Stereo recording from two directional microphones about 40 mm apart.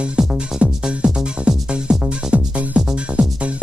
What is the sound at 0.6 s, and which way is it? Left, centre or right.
Music, right.